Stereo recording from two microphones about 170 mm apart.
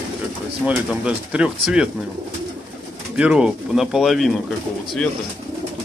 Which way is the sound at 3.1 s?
5° right (ahead or behind).